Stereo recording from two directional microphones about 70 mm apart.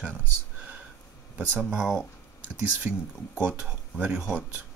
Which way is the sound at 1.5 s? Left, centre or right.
Centre.